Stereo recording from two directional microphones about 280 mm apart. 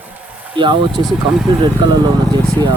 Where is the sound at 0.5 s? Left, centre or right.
Centre.